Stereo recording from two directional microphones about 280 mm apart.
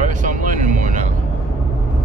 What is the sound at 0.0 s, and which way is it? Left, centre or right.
Vehicle, right.